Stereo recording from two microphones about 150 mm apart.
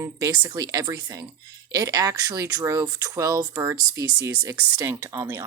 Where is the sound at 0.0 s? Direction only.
25° right (ahead or behind).